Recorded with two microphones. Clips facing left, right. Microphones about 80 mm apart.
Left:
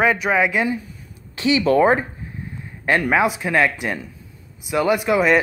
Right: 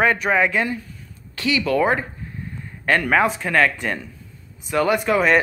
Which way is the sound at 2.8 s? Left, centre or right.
Centre.